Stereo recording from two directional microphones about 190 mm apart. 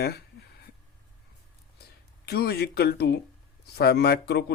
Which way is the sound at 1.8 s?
55° left (ahead or behind).